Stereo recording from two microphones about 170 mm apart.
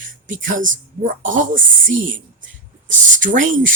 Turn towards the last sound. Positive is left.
turn(degrees=-50)  # may be behind; listen again after turning